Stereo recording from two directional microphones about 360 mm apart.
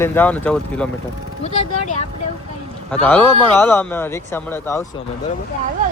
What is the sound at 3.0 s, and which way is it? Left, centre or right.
Speech, centre.